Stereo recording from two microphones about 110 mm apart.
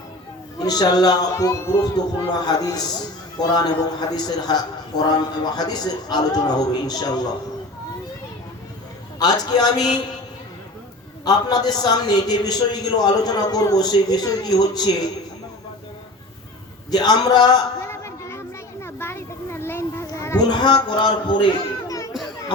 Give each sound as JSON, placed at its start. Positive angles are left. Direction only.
{"t": 0.6, "sound": "a man's voice", "side_deg": 35}
{"t": 9.1, "sound": "a man's voice", "side_deg": 40}
{"t": 11.3, "sound": "a man's voice", "side_deg": 40}
{"t": 16.9, "sound": "a man's voice", "side_deg": 40}
{"t": 17.8, "sound": "a sound", "side_deg": 25}
{"t": 20.4, "sound": "speech", "side_deg": 40}
{"t": 21.8, "sound": "children playing", "side_deg": 30}